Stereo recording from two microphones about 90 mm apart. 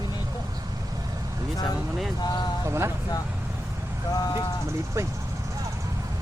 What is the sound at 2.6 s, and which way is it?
Speech, 30° right (ahead or behind).